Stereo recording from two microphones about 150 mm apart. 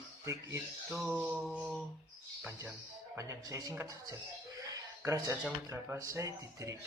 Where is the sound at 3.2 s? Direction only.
20° right (ahead or behind).